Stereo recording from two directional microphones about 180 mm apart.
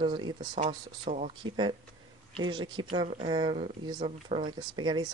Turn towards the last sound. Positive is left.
turn(degrees=-25)  # may be behind; listen again after turning